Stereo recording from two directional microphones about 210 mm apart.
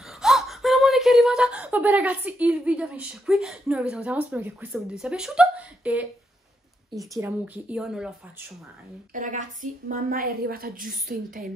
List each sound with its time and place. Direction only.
0.0 s speech: centre (ahead or behind)
7.2 s speech: 10° right (ahead or behind)
9.1 s a woman's voice: 40° right (ahead or behind)